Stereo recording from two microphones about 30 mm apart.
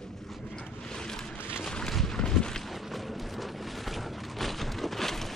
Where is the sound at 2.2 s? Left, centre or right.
Left.